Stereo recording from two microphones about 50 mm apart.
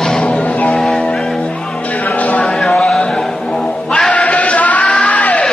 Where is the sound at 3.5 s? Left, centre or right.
Centre.